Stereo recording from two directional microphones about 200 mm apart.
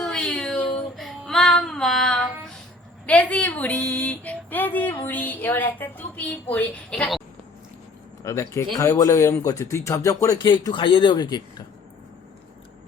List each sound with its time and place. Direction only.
0.0 s child singing: 5° left (ahead or behind)
3.1 s a woman's voice: 5° left (ahead or behind)
8.2 s a woman's voice: 15° left (ahead or behind)